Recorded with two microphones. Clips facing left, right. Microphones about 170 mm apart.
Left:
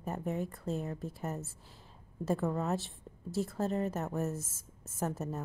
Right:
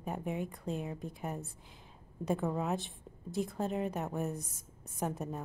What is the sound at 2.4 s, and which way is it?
A woman's voice, 5° right (ahead or behind).